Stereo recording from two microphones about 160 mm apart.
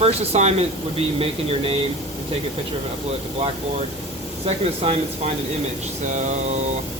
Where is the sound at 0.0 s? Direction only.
40° right (ahead or behind).